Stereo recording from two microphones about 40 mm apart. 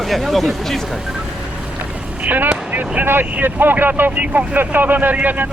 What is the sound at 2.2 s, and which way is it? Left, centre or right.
Speech, right.